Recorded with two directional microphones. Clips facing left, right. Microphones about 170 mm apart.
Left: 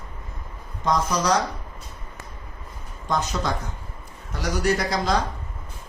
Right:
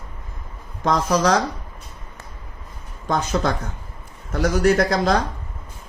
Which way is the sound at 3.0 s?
55° right (ahead or behind).